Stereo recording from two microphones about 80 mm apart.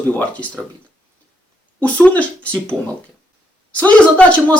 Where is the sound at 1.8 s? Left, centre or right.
Centre.